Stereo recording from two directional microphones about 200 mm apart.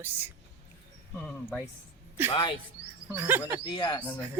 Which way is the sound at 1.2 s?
5° left (ahead or behind).